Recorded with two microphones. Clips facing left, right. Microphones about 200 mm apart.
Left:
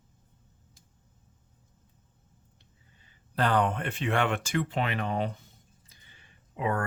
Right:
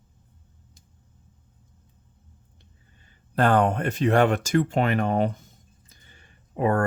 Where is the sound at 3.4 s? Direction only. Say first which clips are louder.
Right 6 dB; 50° right (ahead or behind).